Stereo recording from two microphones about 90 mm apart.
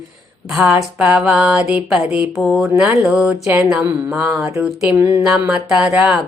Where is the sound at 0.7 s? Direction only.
10° right (ahead or behind).